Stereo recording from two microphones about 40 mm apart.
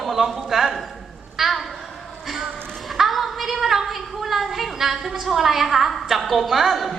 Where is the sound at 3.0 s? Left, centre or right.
Centre.